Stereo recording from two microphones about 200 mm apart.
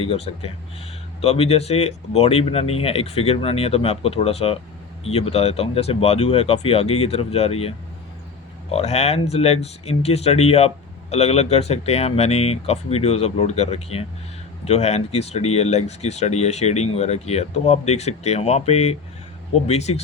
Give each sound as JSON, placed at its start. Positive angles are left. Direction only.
{"t": 0.0, "sound": "speech", "side_deg": 30}
{"t": 8.7, "sound": "speech", "side_deg": 35}